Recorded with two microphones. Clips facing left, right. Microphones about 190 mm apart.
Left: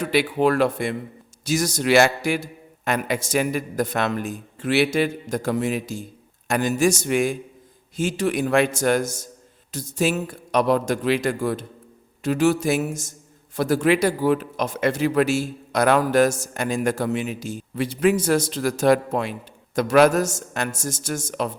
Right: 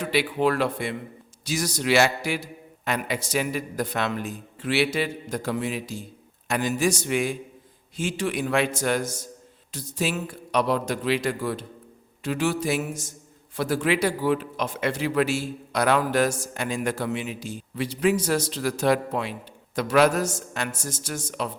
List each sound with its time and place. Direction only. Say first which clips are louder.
0.0 s a man's voice: left 3 dB; 45° left (ahead or behind)